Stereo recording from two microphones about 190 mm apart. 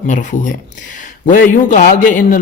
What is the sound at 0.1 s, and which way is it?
A man's voice, 40° left (ahead or behind).